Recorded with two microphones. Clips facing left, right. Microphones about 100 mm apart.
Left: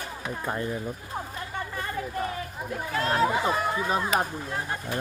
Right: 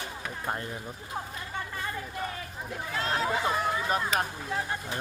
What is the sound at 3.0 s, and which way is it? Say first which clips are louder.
Speech: left 6 dB; 40° left (ahead or behind).